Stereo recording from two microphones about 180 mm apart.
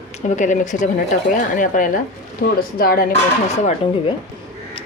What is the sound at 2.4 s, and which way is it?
Speech, 60° left (ahead or behind).